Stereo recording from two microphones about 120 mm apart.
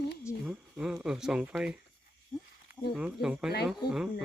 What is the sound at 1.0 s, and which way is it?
Speech, 5° right (ahead or behind).